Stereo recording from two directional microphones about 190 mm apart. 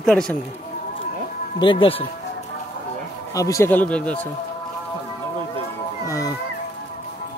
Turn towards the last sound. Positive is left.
turn(degrees=15)  # may be behind; listen again after turning